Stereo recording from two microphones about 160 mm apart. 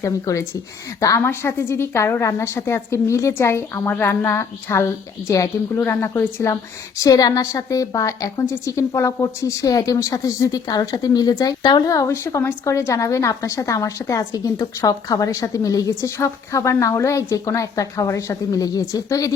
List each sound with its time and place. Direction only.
0.0 s a woman's voice: 20° left (ahead or behind)